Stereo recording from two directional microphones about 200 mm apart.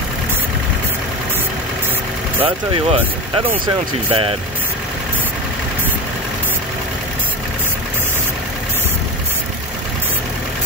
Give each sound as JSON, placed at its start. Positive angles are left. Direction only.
{"t": 2.4, "sound": "speech", "side_deg": -25}